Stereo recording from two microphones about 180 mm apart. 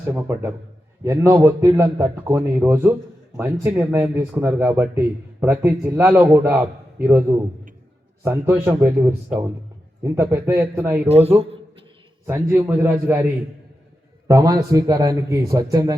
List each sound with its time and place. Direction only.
0.1 s speech: 15° right (ahead or behind)
11.1 s a sound: 35° right (ahead or behind)
12.2 s speech: 15° right (ahead or behind)
14.3 s a man's voice: 20° right (ahead or behind)